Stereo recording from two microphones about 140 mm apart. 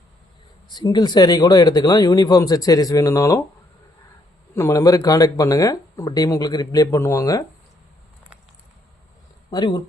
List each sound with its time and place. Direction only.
0.7 s speech: 30° left (ahead or behind)
4.5 s speech: 20° left (ahead or behind)
9.5 s speech: 30° left (ahead or behind)